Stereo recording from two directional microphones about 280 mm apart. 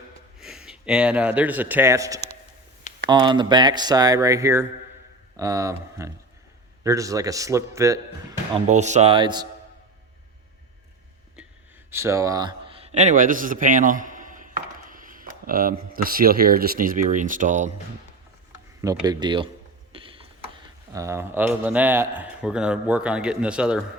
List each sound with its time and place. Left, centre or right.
0.3 s speech: centre
8.5 s speech: right
11.9 s a sound: centre; by 15.7 s right
15.9 s speech: right
18.8 s speech: centre
19.9 s mechanisms: centre
20.9 s a man's voice: centre